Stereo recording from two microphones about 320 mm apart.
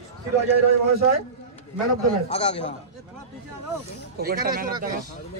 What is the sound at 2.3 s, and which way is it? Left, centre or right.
Speech, centre.